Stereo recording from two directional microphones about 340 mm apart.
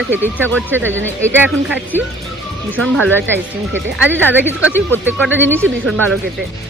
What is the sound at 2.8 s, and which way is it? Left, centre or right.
Speech, right.